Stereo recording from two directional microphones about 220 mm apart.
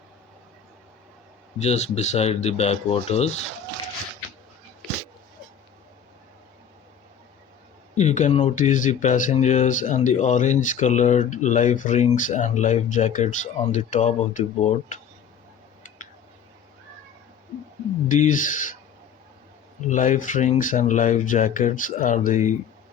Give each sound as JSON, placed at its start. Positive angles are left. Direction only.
{"t": 1.5, "sound": "speech", "side_deg": 30}
{"t": 7.9, "sound": "speech", "side_deg": 30}
{"t": 18.1, "sound": "speech", "side_deg": 35}
{"t": 19.9, "sound": "speech", "side_deg": 35}